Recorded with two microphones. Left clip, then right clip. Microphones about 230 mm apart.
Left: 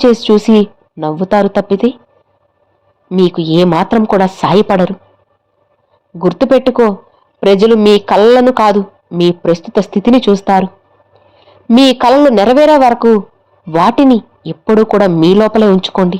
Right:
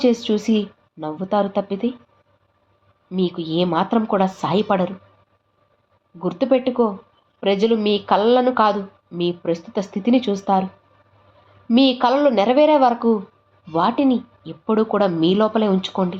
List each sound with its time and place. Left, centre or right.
0.0 s speech: left
3.1 s a woman's voice: left
6.1 s speech: left
11.7 s a woman's voice: left